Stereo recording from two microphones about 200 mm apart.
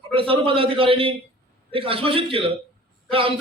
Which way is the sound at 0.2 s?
25° right (ahead or behind).